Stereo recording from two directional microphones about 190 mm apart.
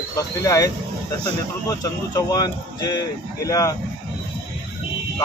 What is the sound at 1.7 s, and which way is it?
Speech, 20° left (ahead or behind).